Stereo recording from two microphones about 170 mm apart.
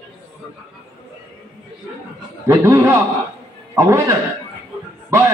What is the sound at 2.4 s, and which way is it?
Speech, 15° right (ahead or behind).